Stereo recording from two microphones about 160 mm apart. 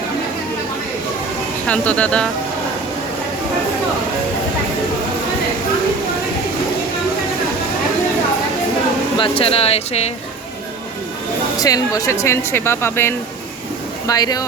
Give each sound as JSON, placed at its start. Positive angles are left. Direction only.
{"t": 1.6, "sound": "speech", "side_deg": 10}
{"t": 9.1, "sound": "speech", "side_deg": 35}
{"t": 11.6, "sound": "speech", "side_deg": 20}